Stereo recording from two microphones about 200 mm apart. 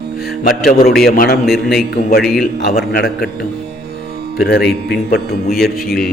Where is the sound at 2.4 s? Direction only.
50° left (ahead or behind).